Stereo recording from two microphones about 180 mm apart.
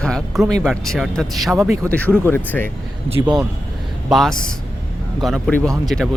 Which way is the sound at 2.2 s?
10° left (ahead or behind).